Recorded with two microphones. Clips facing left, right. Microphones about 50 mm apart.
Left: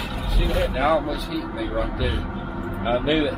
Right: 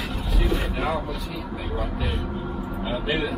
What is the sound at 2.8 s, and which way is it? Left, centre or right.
Speech, left.